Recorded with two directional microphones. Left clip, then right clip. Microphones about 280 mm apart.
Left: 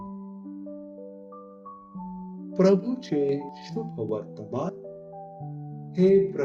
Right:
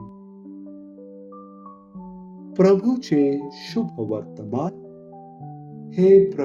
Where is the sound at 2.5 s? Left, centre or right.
Right.